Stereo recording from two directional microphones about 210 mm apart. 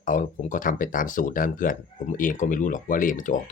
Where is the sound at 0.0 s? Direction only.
40° left (ahead or behind).